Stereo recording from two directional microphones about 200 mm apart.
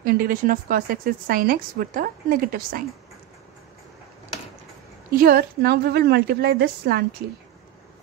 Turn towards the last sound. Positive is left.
turn(degrees=-50)  # may be behind; listen again after turning